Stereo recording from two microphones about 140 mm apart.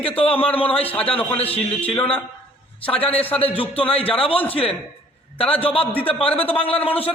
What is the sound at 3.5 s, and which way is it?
A man's voice, 40° left (ahead or behind).